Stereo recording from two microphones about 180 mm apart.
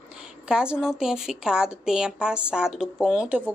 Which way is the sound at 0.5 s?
5° right (ahead or behind).